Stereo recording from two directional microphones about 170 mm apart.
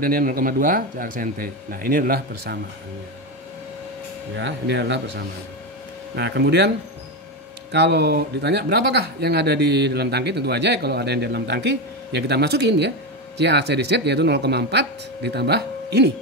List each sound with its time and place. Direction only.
0.0 s speech: 60° right (ahead or behind)
4.4 s a man's voice: 90° right
7.7 s speech: 80° right